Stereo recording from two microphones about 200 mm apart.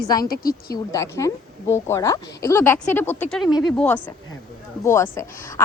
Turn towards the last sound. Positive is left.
turn(degrees=15)  # may be behind; listen again after turning